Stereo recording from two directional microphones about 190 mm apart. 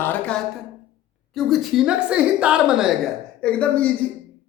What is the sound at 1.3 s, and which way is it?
A woman's voice, centre (ahead or behind).